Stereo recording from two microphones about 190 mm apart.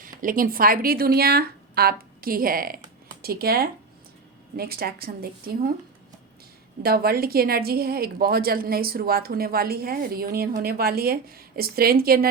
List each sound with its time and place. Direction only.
0.0 s a woman's voice: 45° right (ahead or behind)
6.8 s a woman's voice: 55° right (ahead or behind)